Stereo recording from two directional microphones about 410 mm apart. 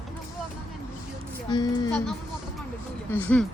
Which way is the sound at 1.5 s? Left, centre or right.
Centre.